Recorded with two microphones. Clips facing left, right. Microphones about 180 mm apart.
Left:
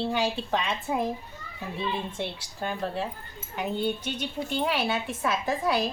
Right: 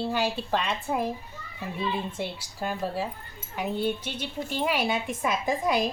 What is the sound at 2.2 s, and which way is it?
A woman's voice, 5° right (ahead or behind).